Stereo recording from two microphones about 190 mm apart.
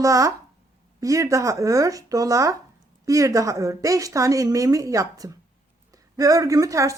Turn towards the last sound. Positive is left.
turn(degrees=-15)  # may be behind; listen again after turning